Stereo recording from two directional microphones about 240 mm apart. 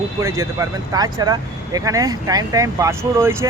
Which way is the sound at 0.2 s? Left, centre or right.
Centre.